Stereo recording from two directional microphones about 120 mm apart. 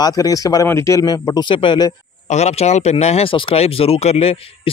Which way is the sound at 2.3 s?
65° left (ahead or behind).